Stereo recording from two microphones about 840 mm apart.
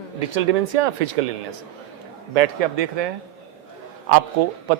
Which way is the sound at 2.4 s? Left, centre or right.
Right.